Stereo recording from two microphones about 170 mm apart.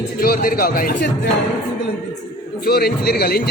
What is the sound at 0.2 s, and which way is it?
Speech, 60° left (ahead or behind).